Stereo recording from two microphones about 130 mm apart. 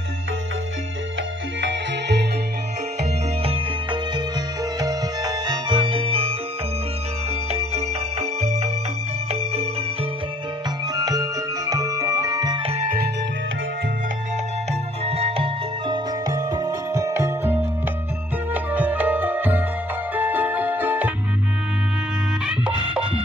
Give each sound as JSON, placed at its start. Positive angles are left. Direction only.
{"t": 3.4, "sound": "music", "side_deg": -35}
{"t": 7.5, "sound": "music", "side_deg": -55}
{"t": 11.0, "sound": "music", "side_deg": -30}
{"t": 14.7, "sound": "music", "side_deg": -50}
{"t": 16.3, "sound": "music", "side_deg": -30}
{"t": 22.5, "sound": "music", "side_deg": -5}